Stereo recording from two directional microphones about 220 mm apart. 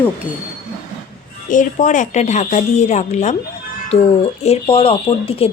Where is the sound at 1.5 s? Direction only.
35° left (ahead or behind).